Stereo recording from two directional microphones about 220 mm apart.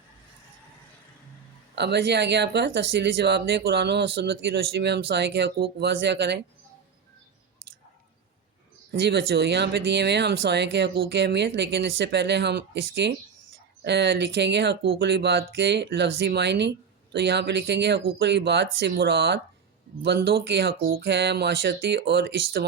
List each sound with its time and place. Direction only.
1.7 s speech: 50° right (ahead or behind)
8.9 s speech: 50° right (ahead or behind)